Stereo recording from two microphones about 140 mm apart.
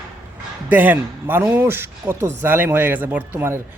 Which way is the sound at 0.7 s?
10° right (ahead or behind).